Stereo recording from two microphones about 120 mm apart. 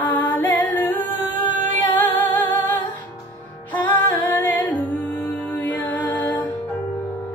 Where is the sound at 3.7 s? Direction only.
15° left (ahead or behind).